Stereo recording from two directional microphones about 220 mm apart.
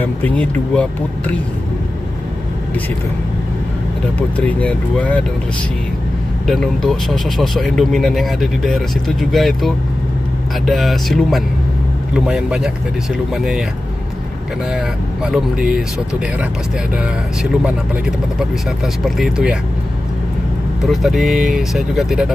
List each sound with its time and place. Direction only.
0.0 s speech: 5° left (ahead or behind)
4.4 s speech: 5° left (ahead or behind)
6.4 s speech: centre (ahead or behind)
15.2 s speech: centre (ahead or behind)
19.0 s speech: centre (ahead or behind)
20.8 s speech: centre (ahead or behind)